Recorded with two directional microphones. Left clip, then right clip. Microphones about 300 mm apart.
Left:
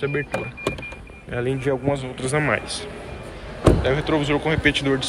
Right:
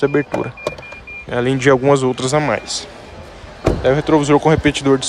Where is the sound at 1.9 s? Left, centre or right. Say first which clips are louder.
Right 9 dB; right.